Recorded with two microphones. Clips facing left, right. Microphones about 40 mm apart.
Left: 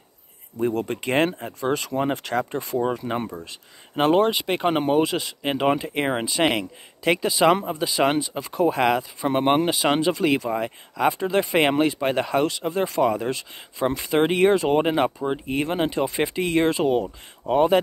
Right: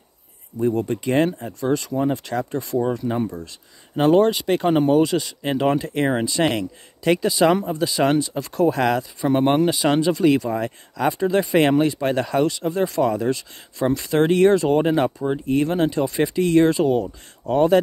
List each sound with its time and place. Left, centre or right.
0.8 s speech: left